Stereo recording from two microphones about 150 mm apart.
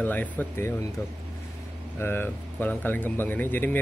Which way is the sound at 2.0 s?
15° left (ahead or behind).